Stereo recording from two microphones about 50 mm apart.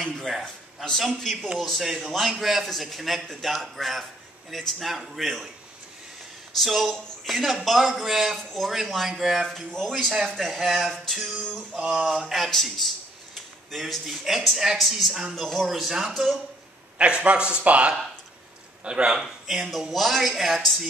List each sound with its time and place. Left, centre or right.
0.3 s a man's voice: centre
6.6 s a man's voice: centre
9.8 s a man's voice: centre
17.0 s speech: right
19.2 s a man's voice: centre